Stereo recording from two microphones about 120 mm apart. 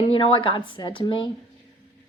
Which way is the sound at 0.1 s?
45° left (ahead or behind).